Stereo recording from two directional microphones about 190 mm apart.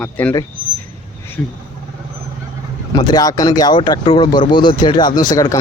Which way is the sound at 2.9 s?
20° left (ahead or behind).